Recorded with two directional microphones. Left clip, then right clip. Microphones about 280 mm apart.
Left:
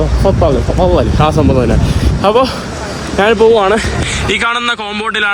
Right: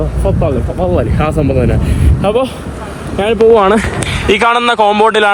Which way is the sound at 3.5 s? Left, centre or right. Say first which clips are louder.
Right 2 dB; right.